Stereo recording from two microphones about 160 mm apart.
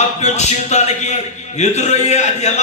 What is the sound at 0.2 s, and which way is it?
A man's voice, 45° left (ahead or behind).